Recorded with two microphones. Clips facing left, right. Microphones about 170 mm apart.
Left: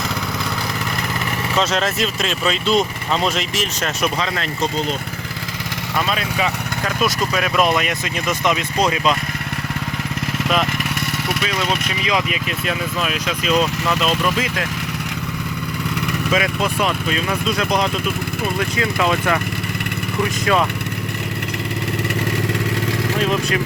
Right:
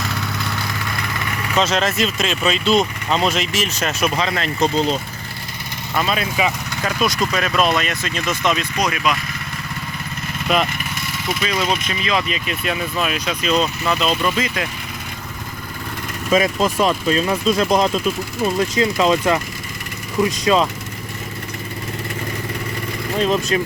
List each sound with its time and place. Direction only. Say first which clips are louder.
1.5 s speech: right 2 dB; centre (ahead or behind)
6.1 s speech: right 3 dB; 5° right (ahead or behind)
7.3 s speech: left 2 dB; 10° left (ahead or behind)
8.8 s speech: left 4 dB; 25° left (ahead or behind)
11.4 s speech: right 4 dB; centre (ahead or behind)
12.0 s speech: even; 15° left (ahead or behind)
12.5 s speech: even; centre (ahead or behind)
16.3 s speech: right 5 dB; 35° right (ahead or behind)
18.8 s speech: right 3 dB; 25° right (ahead or behind)
20.4 s speech: right 1 dB; 20° right (ahead or behind)